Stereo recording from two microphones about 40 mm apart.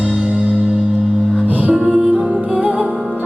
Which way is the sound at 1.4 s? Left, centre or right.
Right.